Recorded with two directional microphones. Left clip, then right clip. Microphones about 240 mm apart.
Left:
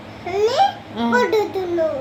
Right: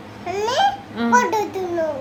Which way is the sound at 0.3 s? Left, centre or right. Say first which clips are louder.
Left 4 dB; centre.